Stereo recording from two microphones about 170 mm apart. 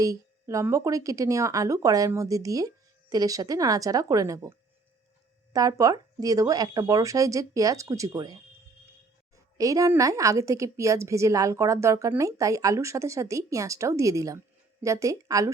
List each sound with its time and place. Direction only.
0.0 s a woman's voice: 20° right (ahead or behind)
5.5 s a woman's voice: 20° right (ahead or behind)